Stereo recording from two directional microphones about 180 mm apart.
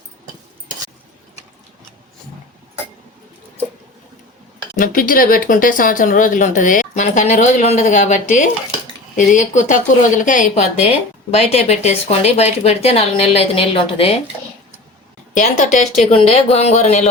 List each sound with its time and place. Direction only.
4.8 s speech: 50° left (ahead or behind); by 14.2 s 30° left (ahead or behind)
15.4 s speech: 45° left (ahead or behind)